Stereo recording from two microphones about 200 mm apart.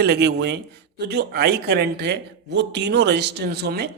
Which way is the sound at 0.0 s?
55° right (ahead or behind).